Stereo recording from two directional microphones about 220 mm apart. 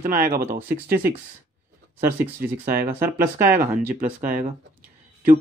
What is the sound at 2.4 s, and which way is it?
Speech, 40° right (ahead or behind).